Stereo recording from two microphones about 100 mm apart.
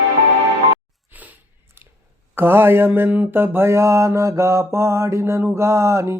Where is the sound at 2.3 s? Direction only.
25° right (ahead or behind).